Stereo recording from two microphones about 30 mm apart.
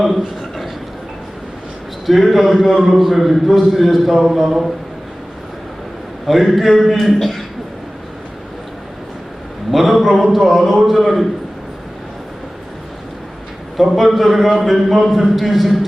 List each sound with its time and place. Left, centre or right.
2.0 s a man's voice: centre
6.2 s a man's voice: centre
9.7 s a man's voice: centre
13.7 s a man's voice: centre